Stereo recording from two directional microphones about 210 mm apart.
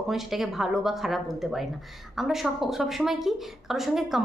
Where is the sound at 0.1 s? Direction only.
Centre (ahead or behind).